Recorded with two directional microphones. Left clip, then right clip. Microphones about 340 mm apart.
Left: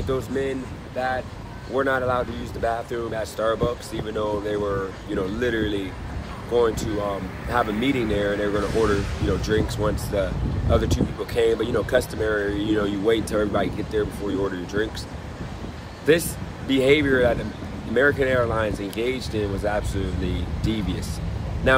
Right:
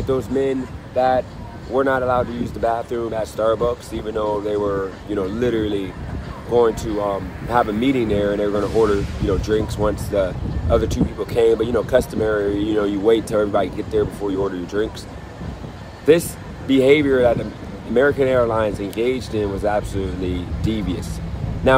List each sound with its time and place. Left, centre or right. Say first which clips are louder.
0.1 s speech: right 6 dB; centre
16.1 s speech: right 5 dB; centre